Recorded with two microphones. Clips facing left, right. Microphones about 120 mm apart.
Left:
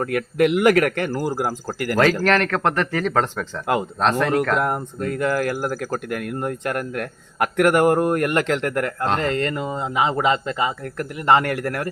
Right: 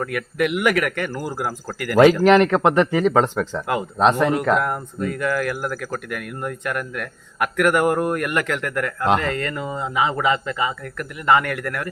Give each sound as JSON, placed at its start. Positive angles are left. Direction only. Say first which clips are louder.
{"t": 0.0, "sound": "speech", "louder": "left 4 dB", "side_deg": 30}
{"t": 2.2, "sound": "speech", "louder": "right 5 dB", "side_deg": -15}
{"t": 5.1, "sound": "speech", "louder": "left 3 dB", "side_deg": 30}